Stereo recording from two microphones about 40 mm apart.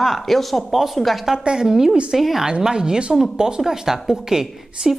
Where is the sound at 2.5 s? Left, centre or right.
Centre.